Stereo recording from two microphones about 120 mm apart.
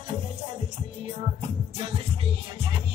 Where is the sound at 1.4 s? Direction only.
55° right (ahead or behind).